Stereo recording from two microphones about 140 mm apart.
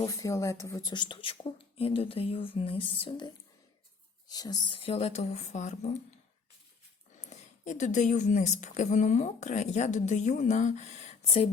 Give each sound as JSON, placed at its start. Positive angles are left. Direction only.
{"t": 0.1, "sound": "speech", "side_deg": 25}
{"t": 7.2, "sound": "a woman's voice", "side_deg": 55}